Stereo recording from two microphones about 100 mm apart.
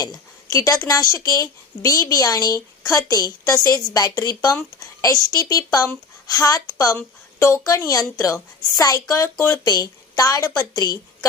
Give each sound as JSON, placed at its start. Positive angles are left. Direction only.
{"t": 0.0, "sound": "a woman's voice", "side_deg": 35}
{"t": 9.6, "sound": "a woman's voice", "side_deg": 40}